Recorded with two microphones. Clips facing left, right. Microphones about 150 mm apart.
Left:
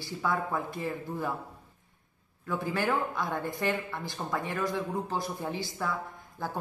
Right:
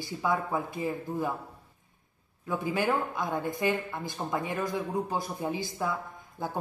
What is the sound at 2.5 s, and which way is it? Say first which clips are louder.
Speech: right 1 dB; 15° right (ahead or behind).